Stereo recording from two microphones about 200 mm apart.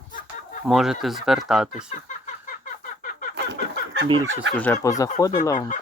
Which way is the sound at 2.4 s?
45° left (ahead or behind).